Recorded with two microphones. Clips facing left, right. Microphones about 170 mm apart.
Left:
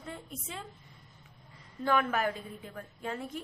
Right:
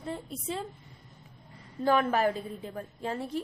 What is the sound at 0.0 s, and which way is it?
Speech, 35° right (ahead or behind).